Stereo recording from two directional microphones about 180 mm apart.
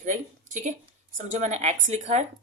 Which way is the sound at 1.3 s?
40° right (ahead or behind).